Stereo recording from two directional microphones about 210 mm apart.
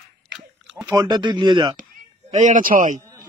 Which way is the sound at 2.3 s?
35° right (ahead or behind).